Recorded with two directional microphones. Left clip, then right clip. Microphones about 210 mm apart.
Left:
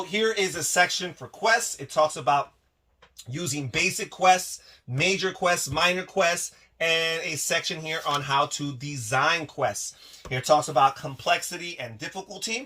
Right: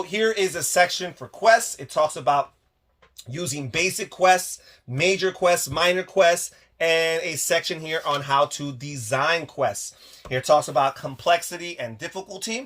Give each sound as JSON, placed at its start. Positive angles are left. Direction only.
{"t": 0.1, "sound": "speech", "side_deg": -45}
{"t": 11.2, "sound": "speech", "side_deg": -55}